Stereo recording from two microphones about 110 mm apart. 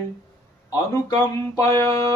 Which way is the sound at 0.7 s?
30° left (ahead or behind).